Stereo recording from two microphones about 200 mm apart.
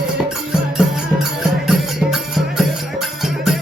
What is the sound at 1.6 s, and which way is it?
Music, centre (ahead or behind).